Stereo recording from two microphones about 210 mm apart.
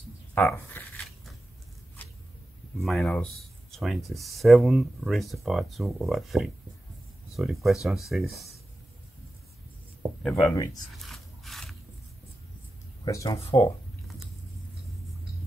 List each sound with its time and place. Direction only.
0.3 s shuffling cards: 10° left (ahead or behind)
2.0 s a sound: 10° left (ahead or behind)
2.8 s speech: centre (ahead or behind)
10.2 s speech: 5° left (ahead or behind)
10.5 s speech: 15° left (ahead or behind)
11.0 s rub: centre (ahead or behind)
13.0 s speech: 15° left (ahead or behind)